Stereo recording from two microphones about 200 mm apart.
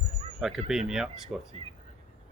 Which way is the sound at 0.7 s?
5° right (ahead or behind).